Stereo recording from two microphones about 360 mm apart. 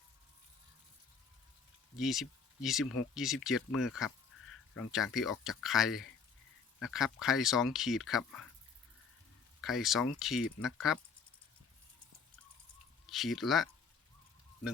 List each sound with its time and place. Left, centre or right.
2.0 s speech: centre
4.4 s a sound: left
4.9 s speech: centre
9.6 s speech: centre
13.1 s speech: centre